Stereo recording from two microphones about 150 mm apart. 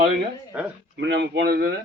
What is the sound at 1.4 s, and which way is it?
Speech, 90° right.